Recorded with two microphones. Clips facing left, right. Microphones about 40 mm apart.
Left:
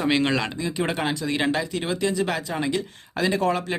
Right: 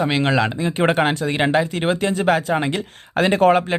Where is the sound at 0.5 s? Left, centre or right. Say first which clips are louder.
Right 8 dB; right.